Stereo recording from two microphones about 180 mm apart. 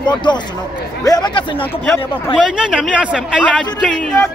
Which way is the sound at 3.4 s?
5° left (ahead or behind).